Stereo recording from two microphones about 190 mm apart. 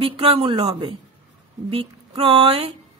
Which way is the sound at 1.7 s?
30° right (ahead or behind).